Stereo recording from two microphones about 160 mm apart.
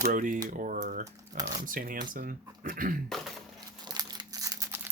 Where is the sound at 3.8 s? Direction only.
25° right (ahead or behind).